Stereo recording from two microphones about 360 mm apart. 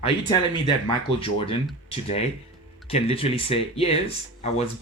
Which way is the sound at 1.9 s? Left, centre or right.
Centre.